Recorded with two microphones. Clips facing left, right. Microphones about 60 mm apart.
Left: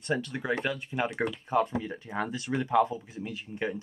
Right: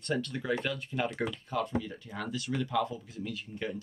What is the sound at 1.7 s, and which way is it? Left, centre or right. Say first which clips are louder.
Speech: left 3 dB; left.